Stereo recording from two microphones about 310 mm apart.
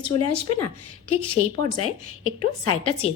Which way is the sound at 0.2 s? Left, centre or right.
Left.